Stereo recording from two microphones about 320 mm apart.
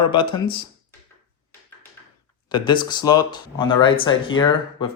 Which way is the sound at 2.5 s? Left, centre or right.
Centre.